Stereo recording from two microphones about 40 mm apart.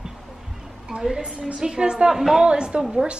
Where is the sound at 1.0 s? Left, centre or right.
Centre.